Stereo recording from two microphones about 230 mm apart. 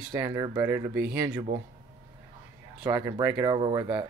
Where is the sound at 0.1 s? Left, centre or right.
Centre.